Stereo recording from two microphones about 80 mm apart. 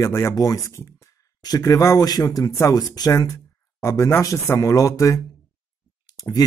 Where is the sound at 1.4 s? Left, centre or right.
Left.